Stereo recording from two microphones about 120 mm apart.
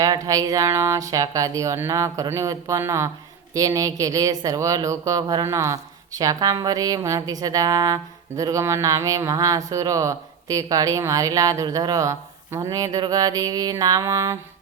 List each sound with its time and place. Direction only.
0.0 s speech: 30° right (ahead or behind)